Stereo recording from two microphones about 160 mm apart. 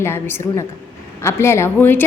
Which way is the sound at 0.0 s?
15° left (ahead or behind).